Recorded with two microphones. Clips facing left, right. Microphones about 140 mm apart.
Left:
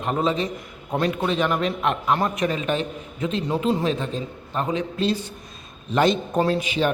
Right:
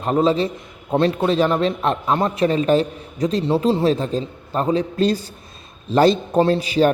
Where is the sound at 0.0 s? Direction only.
35° right (ahead or behind).